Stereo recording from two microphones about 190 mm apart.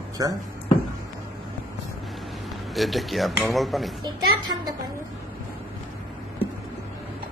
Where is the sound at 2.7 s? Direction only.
Centre (ahead or behind).